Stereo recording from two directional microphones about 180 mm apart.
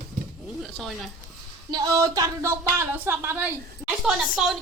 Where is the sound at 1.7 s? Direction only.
20° right (ahead or behind).